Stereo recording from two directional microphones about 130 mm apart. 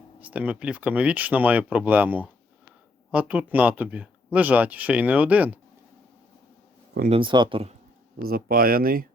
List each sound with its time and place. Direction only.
0.2 s speech: 10° right (ahead or behind)
7.1 s speech: 40° right (ahead or behind)
8.5 s speech: 90° right